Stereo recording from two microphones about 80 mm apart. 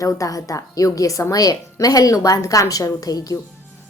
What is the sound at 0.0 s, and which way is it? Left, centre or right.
A woman's voice, left.